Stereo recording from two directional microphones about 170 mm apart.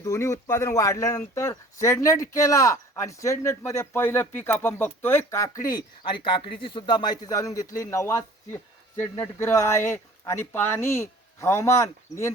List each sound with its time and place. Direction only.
0.0 s speech: 15° left (ahead or behind)